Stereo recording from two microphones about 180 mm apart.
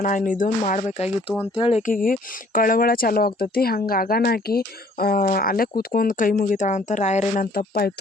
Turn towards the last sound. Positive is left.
turn(degrees=55)  # may be behind; listen again after turning